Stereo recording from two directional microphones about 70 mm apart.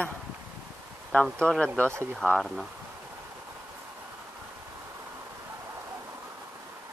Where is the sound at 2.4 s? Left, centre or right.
Centre.